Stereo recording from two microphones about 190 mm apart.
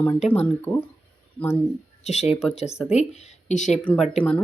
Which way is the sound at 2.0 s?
35° left (ahead or behind).